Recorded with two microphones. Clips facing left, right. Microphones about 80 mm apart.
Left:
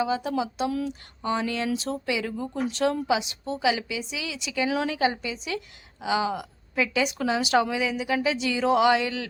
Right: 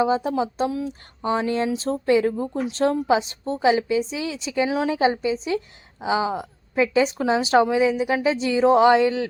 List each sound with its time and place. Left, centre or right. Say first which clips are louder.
0.0 s a woman's voice: right 5 dB; right